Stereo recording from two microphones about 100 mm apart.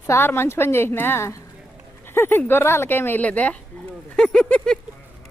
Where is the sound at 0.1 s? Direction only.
25° left (ahead or behind).